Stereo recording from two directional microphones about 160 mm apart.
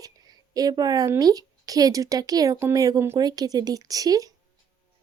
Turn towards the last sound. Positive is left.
turn(degrees=-20)  # may be behind; listen again after turning